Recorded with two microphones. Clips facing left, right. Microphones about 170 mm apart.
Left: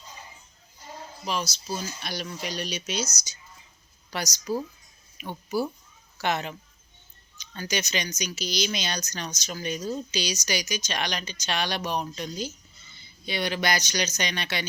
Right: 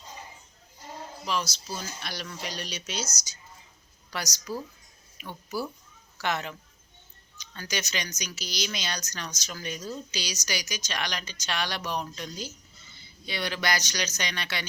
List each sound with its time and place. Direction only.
1.2 s speech: 15° left (ahead or behind)
4.1 s speech: 25° left (ahead or behind)